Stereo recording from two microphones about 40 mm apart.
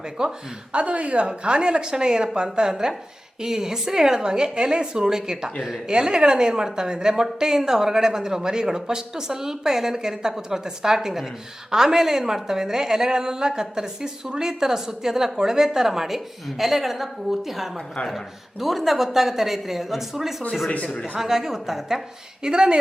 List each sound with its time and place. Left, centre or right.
0.2 s speech: centre
0.7 s a woman's voice: right; by 22.0 s centre
22.4 s speech: right